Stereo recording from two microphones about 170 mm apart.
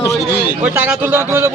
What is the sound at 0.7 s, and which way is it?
Speech, 10° right (ahead or behind).